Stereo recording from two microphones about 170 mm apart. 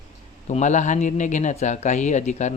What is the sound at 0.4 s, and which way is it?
A man's voice, 45° left (ahead or behind).